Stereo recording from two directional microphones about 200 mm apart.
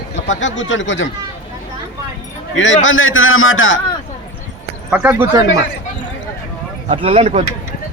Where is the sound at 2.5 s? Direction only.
65° left (ahead or behind).